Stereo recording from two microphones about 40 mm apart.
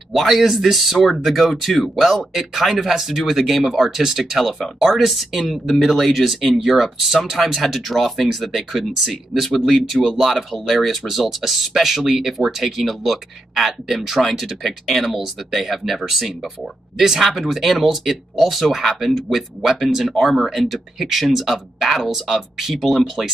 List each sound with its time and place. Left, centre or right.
0.1 s speech: centre